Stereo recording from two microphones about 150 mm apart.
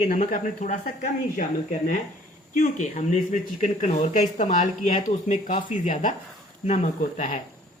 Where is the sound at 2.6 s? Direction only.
55° left (ahead or behind).